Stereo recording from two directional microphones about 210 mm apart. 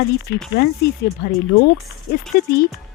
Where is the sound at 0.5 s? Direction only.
50° left (ahead or behind).